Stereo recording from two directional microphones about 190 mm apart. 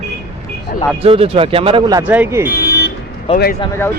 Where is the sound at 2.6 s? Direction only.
60° left (ahead or behind).